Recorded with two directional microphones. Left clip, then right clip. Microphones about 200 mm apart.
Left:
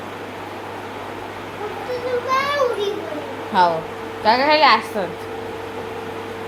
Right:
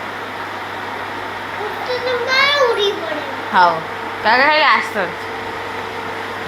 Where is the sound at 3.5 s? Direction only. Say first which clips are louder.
Right 4 dB; 15° left (ahead or behind).